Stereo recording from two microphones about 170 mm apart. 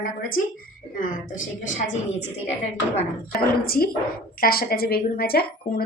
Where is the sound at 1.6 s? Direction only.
45° left (ahead or behind).